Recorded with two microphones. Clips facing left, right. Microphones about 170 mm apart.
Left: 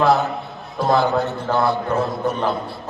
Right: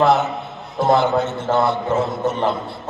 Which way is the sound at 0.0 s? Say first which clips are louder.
Right 1 dB; 20° right (ahead or behind).